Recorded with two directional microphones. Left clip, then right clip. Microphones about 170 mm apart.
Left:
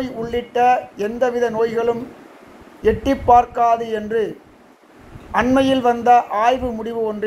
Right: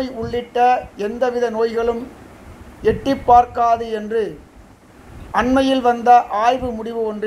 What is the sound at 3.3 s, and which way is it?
Speech, 10° left (ahead or behind).